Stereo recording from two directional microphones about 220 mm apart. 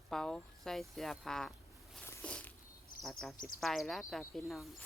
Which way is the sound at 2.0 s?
10° left (ahead or behind).